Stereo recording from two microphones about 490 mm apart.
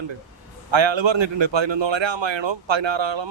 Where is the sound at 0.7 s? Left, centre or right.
Right.